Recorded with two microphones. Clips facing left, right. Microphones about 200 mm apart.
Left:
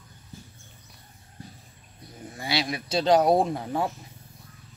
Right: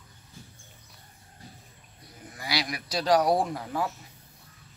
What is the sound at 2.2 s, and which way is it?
Speech, 25° left (ahead or behind).